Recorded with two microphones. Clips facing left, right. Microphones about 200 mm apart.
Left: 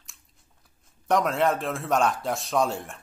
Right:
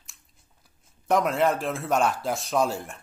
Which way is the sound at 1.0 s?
Centre (ahead or behind).